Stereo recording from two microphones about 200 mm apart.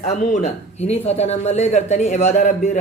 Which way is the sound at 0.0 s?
35° left (ahead or behind).